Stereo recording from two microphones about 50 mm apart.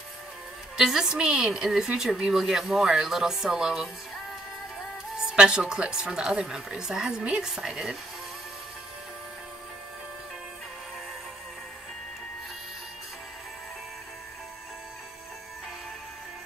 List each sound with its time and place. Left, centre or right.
0.7 s a woman's voice: centre
5.1 s a woman's voice: centre